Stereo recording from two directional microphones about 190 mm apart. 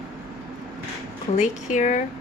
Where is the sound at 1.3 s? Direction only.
40° left (ahead or behind).